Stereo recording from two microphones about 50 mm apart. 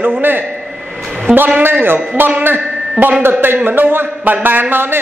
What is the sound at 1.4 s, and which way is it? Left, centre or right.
A man's voice, right.